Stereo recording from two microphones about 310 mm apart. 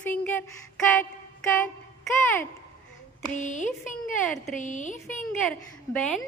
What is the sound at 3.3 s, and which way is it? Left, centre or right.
A woman's voice, left.